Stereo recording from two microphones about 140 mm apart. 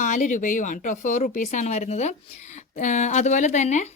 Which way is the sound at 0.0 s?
65° left (ahead or behind).